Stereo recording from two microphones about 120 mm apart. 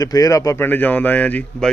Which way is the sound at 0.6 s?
15° left (ahead or behind).